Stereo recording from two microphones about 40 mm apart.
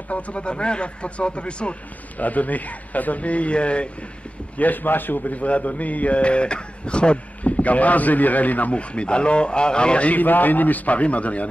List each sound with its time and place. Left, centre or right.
0.1 s speech: left
2.1 s speech: left
4.6 s a man's voice: left
5.3 s speech: left
8.7 s speech: left
10.1 s a man's voice: left